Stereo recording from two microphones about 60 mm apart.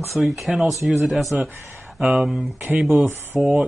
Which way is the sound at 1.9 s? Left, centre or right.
Centre.